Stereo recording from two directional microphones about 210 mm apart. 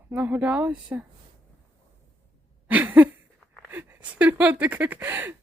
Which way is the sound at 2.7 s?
10° right (ahead or behind).